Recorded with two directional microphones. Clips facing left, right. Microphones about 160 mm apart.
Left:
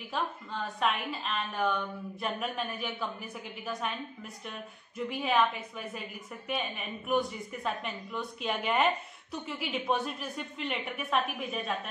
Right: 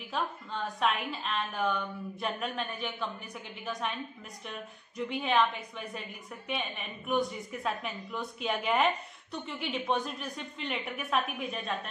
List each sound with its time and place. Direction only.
0.1 s a woman's voice: centre (ahead or behind)
4.5 s a woman's voice: centre (ahead or behind)